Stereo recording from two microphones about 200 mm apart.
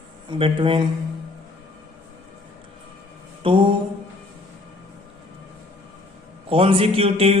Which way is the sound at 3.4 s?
25° right (ahead or behind).